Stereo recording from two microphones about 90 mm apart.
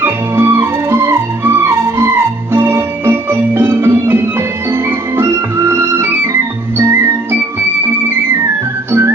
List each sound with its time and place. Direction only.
0.0 s music: 25° right (ahead or behind)
8.9 s organ: 25° right (ahead or behind)